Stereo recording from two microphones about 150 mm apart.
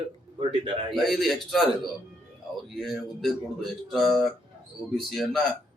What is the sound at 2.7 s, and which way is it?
Speech, centre (ahead or behind).